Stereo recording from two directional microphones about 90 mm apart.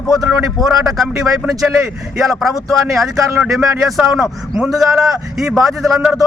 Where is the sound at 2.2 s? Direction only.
Centre (ahead or behind).